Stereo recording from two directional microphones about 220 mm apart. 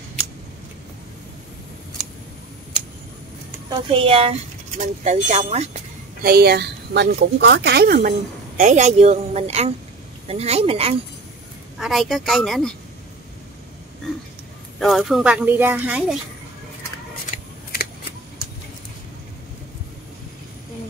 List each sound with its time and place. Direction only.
3.8 s speech: 25° right (ahead or behind)
6.2 s a woman's voice: 45° right (ahead or behind)
8.5 s speech: 30° right (ahead or behind)
11.8 s speech: centre (ahead or behind)
14.8 s speech: centre (ahead or behind)